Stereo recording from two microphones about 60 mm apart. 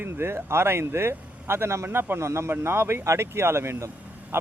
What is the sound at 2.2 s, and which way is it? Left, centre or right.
Speech, right.